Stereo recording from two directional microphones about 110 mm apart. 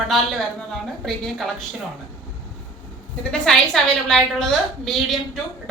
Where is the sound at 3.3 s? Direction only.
5° left (ahead or behind).